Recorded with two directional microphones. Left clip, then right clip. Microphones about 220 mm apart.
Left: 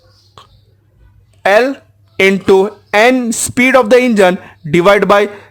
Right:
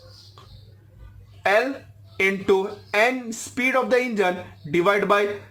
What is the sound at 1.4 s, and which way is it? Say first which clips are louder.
Speech: left 10 dB; 50° left (ahead or behind).